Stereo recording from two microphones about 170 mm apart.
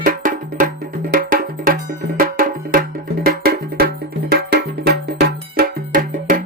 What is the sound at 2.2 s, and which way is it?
Music, 55° right (ahead or behind).